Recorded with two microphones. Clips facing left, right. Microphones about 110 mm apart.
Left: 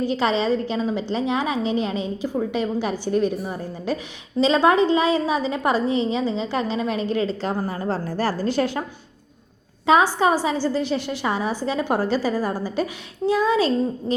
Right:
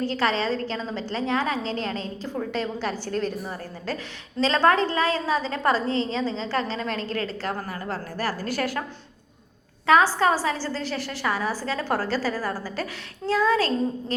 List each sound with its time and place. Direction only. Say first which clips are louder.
0.0 s a woman's voice: left 3 dB; 15° left (ahead or behind)
7.7 s a woman's voice: left 6 dB; 25° left (ahead or behind)
9.8 s a woman's voice: left 2 dB; 20° left (ahead or behind)